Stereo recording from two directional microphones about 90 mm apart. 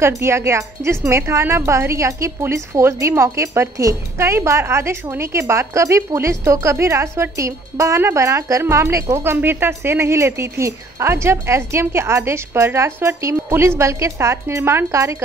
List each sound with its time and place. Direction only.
0.0 s speech: 30° right (ahead or behind)